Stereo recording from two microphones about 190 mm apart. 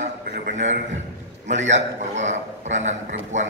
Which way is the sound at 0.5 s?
40° right (ahead or behind).